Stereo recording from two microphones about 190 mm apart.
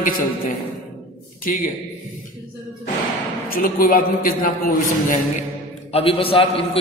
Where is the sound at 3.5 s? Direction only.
50° left (ahead or behind).